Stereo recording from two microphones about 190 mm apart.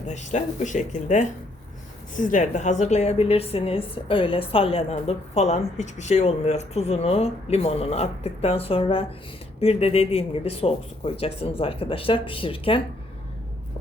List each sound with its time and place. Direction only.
0.1 s a woman's voice: 40° left (ahead or behind)